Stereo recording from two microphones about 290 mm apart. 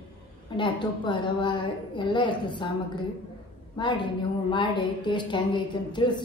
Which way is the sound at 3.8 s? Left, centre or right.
Centre.